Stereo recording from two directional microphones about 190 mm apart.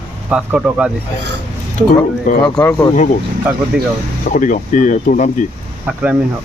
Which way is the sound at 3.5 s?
5° right (ahead or behind).